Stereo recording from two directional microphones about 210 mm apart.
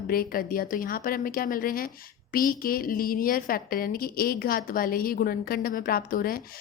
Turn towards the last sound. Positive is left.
turn(degrees=45)  # may be behind; listen again after turning